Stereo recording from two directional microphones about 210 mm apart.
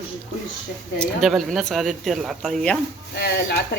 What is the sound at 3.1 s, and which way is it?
Speech, 50° left (ahead or behind).